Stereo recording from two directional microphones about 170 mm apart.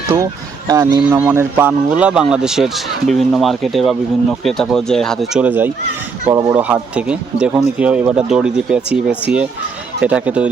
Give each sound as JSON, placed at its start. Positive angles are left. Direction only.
{"t": 0.7, "sound": "speech", "side_deg": -20}
{"t": 1.2, "sound": "speech", "side_deg": -10}